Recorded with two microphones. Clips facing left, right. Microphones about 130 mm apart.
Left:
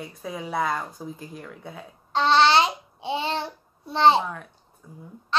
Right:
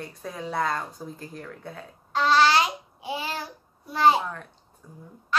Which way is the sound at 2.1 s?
25° left (ahead or behind).